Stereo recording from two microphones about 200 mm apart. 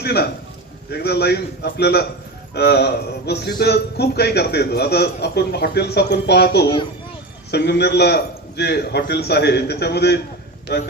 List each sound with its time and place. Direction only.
0.0 s a man's voice: 55° left (ahead or behind)